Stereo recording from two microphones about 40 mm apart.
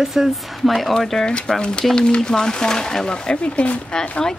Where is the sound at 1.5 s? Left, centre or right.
Left.